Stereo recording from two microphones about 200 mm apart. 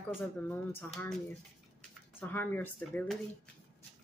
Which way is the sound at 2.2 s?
10° left (ahead or behind).